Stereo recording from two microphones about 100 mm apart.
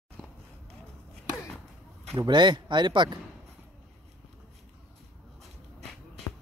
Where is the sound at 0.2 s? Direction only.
10° right (ahead or behind).